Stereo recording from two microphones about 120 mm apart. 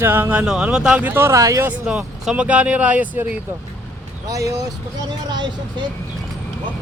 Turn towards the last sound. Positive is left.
turn(degrees=-40)  # may be behind; listen again after turning